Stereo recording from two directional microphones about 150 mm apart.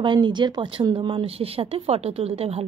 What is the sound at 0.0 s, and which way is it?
Speech, 30° right (ahead or behind).